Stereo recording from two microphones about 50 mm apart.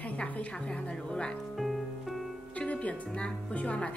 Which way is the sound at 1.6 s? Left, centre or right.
Centre.